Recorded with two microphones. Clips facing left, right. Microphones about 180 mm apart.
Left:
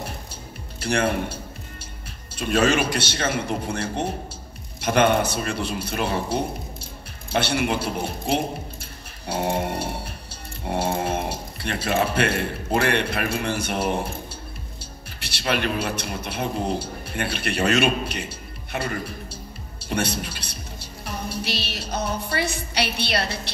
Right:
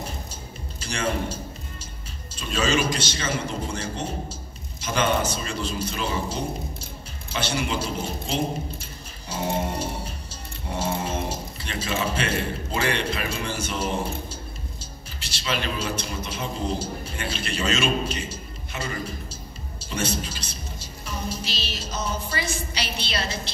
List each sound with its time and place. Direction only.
0.7 s a man's voice: 60° left (ahead or behind)